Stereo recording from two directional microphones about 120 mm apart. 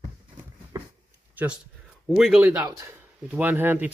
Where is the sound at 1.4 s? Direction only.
15° right (ahead or behind).